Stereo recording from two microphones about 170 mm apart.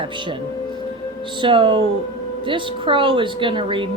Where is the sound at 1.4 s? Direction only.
30° right (ahead or behind).